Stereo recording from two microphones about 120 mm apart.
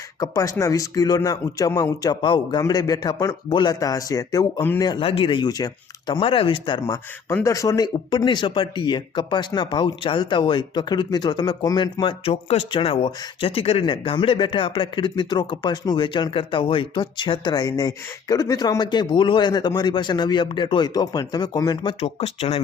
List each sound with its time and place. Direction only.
0.2 s a man's voice: 30° left (ahead or behind)
6.1 s a man's voice: 50° left (ahead or behind); by 21.9 s 35° left (ahead or behind)
22.0 s speech: 55° left (ahead or behind)